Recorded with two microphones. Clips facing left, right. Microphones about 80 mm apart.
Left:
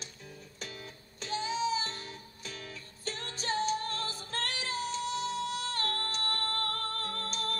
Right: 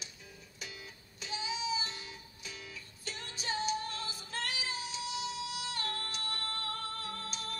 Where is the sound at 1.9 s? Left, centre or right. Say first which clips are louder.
Left 3 dB; left.